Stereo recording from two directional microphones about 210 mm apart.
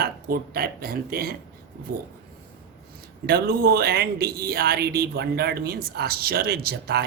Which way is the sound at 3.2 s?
50° right (ahead or behind).